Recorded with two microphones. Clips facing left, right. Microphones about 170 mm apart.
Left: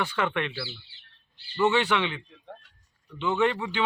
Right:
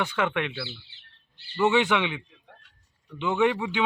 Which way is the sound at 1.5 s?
10° right (ahead or behind).